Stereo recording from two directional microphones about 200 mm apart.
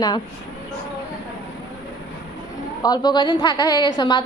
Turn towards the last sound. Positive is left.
turn(degrees=20)  # may be behind; listen again after turning